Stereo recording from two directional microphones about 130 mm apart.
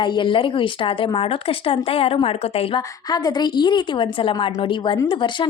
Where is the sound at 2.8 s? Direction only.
30° left (ahead or behind).